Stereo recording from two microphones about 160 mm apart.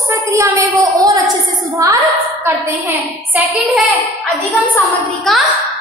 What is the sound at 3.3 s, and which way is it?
Speech, 10° right (ahead or behind).